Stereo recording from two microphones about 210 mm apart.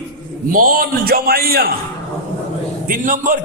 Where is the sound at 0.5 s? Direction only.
45° right (ahead or behind).